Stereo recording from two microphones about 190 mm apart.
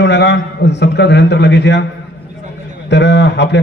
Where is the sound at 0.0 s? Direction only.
65° left (ahead or behind).